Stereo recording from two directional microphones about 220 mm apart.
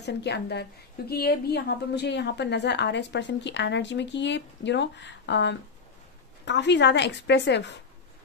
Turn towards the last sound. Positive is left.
turn(degrees=50)  # may be behind; listen again after turning